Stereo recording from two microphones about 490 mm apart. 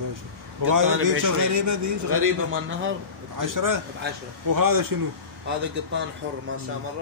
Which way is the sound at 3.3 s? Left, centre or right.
Right.